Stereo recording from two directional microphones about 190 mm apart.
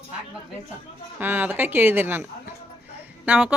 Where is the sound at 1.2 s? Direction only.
10° right (ahead or behind).